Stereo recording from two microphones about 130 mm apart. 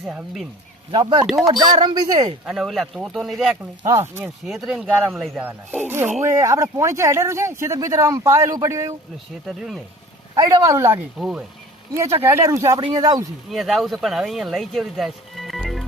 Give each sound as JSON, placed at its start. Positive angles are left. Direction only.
{"t": 0.1, "sound": "speech", "side_deg": -5}
{"t": 0.9, "sound": "speech", "side_deg": -35}
{"t": 2.5, "sound": "speech", "side_deg": 0}
{"t": 3.8, "sound": "speech", "side_deg": -20}
{"t": 4.4, "sound": "speech", "side_deg": 0}
{"t": 5.1, "sound": "speech", "side_deg": 0}
{"t": 5.4, "sound": "speech", "side_deg": -15}
{"t": 9.5, "sound": "speech", "side_deg": 0}
{"t": 10.3, "sound": "speech", "side_deg": -25}
{"t": 11.2, "sound": "speech", "side_deg": -5}
{"t": 12.2, "sound": "speech", "side_deg": -20}
{"t": 13.5, "sound": "speech", "side_deg": 0}